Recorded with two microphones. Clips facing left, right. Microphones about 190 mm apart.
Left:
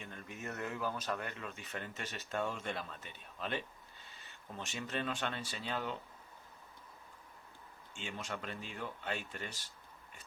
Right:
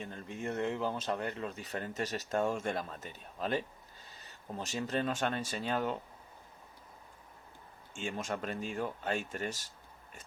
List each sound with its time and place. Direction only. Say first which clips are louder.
0.0 s speech: right 6 dB; 30° right (ahead or behind)
7.9 s speech: right 6 dB; 45° right (ahead or behind)